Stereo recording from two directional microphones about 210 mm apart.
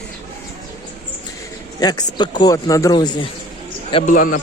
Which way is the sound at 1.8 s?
20° left (ahead or behind).